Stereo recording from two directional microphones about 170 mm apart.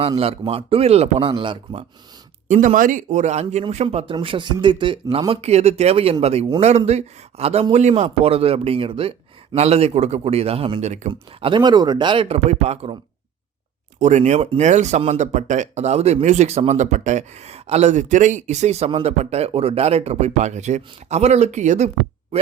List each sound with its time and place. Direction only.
0.2 s speech: 35° right (ahead or behind)
2.5 s speech: 50° right (ahead or behind)
11.1 s speech: 30° right (ahead or behind)
14.0 s speech: 45° right (ahead or behind)